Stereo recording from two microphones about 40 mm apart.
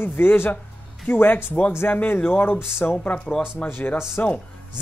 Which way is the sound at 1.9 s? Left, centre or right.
Left.